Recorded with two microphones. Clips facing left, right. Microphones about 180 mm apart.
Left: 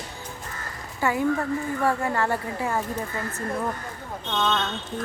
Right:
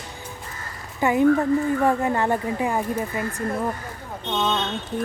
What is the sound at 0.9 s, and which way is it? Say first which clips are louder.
A woman's voice: right 6 dB; 20° right (ahead or behind).